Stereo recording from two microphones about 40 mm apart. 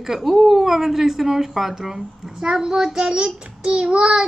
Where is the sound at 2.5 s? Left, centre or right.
Centre.